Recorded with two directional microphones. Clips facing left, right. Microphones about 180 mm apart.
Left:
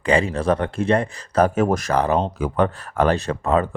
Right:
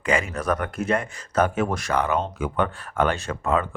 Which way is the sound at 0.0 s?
30° left (ahead or behind).